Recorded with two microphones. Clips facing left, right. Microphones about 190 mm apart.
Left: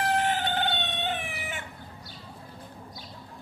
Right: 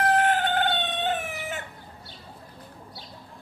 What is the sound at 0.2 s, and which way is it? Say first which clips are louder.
Chicken: right 4 dB; 50° right (ahead or behind).